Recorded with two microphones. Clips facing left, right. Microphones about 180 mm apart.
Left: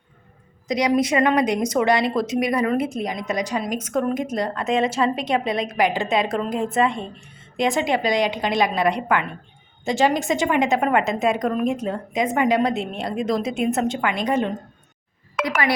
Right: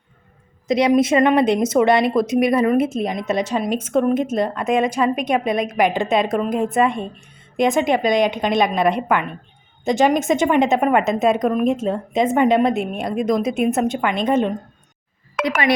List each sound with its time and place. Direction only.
0.7 s speech: 25° right (ahead or behind)